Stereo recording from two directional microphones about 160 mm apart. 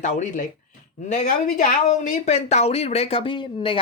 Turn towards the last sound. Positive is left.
turn(degrees=30)  # may be behind; listen again after turning